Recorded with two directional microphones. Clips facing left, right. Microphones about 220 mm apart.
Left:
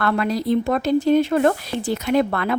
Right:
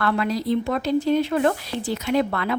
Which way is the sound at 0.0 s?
50° left (ahead or behind).